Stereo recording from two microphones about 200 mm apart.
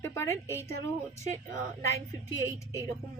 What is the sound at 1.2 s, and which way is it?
Speech, 35° right (ahead or behind).